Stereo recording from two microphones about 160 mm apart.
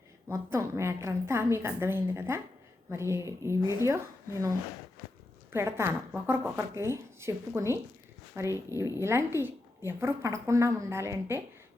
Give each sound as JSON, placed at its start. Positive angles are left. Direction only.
{"t": 0.3, "sound": "speech", "side_deg": -15}